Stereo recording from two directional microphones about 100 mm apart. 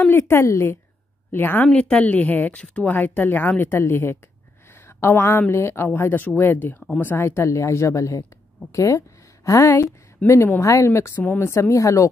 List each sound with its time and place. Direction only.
0.0 s a woman's voice: 25° left (ahead or behind)
1.7 s a woman's voice: 10° left (ahead or behind); by 12.1 s 30° left (ahead or behind)